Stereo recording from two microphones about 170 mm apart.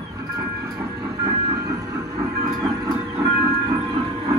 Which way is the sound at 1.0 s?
20° right (ahead or behind).